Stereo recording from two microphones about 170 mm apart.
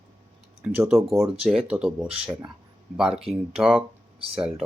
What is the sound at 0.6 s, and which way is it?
Speech, 5° right (ahead or behind).